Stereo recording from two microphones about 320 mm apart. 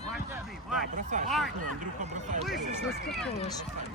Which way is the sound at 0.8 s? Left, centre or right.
Right.